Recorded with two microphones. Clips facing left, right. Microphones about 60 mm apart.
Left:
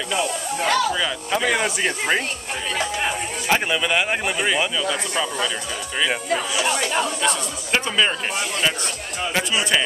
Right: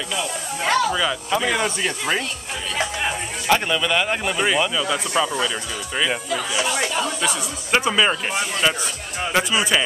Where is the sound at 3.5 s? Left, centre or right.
Centre.